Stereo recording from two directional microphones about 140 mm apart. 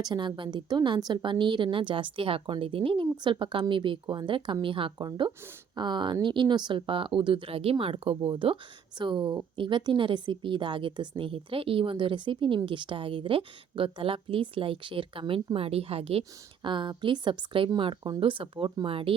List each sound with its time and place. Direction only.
0.0 s a woman's voice: 30° right (ahead or behind)